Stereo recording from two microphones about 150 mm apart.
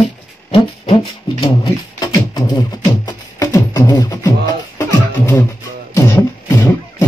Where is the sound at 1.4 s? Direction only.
30° left (ahead or behind).